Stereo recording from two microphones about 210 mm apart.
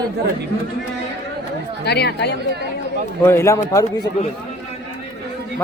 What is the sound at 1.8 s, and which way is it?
Speech, 50° left (ahead or behind).